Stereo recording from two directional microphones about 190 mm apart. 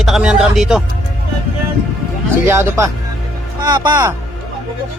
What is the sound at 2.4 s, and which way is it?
Speech, 15° right (ahead or behind).